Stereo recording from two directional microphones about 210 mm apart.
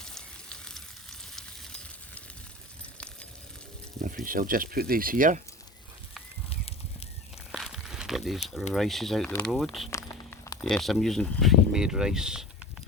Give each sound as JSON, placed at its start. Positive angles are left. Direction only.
{"t": 0.0, "sound": "a sound", "side_deg": 5}
{"t": 4.0, "sound": "speech", "side_deg": -40}
{"t": 7.5, "sound": "crumpling", "side_deg": 0}
{"t": 8.7, "sound": "speech", "side_deg": 0}
{"t": 9.9, "sound": "a sound", "side_deg": 15}
{"t": 10.6, "sound": "speech", "side_deg": 0}